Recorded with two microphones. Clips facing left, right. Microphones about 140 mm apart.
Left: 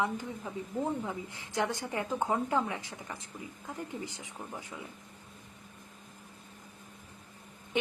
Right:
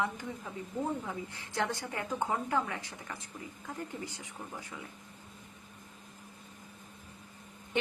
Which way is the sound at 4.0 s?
20° left (ahead or behind).